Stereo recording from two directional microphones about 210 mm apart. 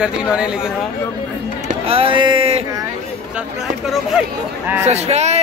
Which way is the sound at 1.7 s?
25° right (ahead or behind).